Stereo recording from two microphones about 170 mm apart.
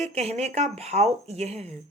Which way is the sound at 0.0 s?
40° right (ahead or behind).